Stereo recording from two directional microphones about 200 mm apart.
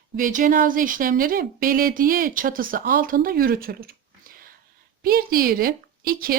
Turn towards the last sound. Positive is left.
turn(degrees=-45)  # may be behind; listen again after turning